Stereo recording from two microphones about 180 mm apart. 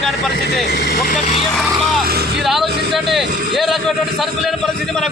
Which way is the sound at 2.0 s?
60° right (ahead or behind).